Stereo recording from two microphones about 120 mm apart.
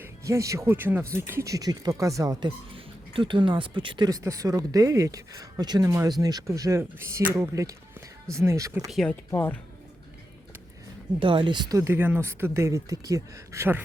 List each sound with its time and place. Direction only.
0.0 s speech: 25° right (ahead or behind)
2.7 s speech: 45° right (ahead or behind); by 8.9 s 25° right (ahead or behind)
8.9 s speech: centre (ahead or behind)
11.2 s speech: 45° right (ahead or behind)
11.8 s speech: 20° right (ahead or behind)